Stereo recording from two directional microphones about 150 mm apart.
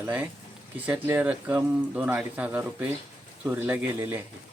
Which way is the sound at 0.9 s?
10° right (ahead or behind).